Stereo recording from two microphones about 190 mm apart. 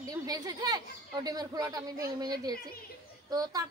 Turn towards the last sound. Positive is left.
turn(degrees=-20)  # may be behind; listen again after turning